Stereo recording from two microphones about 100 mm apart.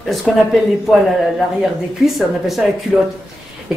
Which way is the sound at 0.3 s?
Centre (ahead or behind).